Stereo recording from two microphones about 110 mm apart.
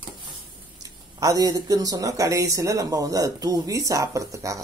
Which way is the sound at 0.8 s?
30° right (ahead or behind).